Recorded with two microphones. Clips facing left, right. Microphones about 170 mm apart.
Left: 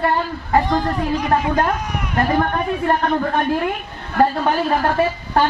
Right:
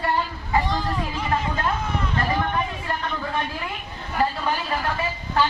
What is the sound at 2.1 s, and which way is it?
A woman's voice, 50° left (ahead or behind).